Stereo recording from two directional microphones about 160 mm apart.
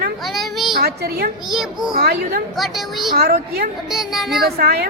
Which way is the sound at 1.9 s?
75° right (ahead or behind).